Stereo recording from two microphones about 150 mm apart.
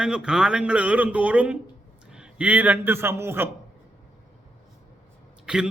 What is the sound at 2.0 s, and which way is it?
A man's voice, 5° right (ahead or behind).